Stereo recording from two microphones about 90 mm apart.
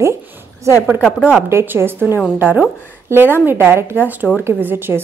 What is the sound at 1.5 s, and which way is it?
A woman's voice, 30° right (ahead or behind).